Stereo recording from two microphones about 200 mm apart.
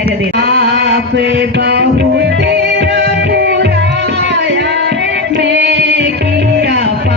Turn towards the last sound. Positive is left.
turn(degrees=-60)  # may be behind; listen again after turning